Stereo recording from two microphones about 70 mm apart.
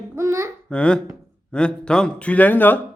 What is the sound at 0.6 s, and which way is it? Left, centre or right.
A man's voice, centre.